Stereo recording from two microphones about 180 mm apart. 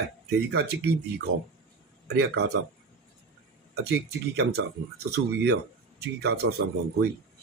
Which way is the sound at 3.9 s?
65° right (ahead or behind).